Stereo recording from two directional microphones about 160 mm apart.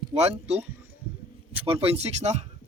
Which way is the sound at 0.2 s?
40° right (ahead or behind).